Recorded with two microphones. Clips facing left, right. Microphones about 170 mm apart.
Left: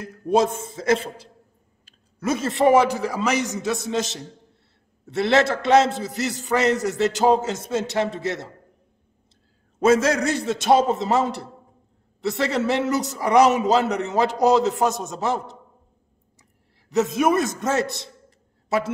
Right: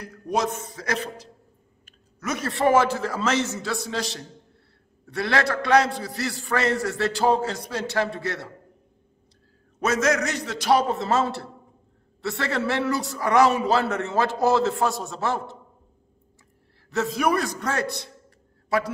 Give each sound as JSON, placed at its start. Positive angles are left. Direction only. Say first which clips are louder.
{"t": 0.0, "sound": "a man's voice", "louder": "left 6 dB", "side_deg": 25}
{"t": 9.8, "sound": "a man's voice", "louder": "left 5 dB", "side_deg": 30}
{"t": 16.9, "sound": "a man's voice", "louder": "left 4 dB", "side_deg": 20}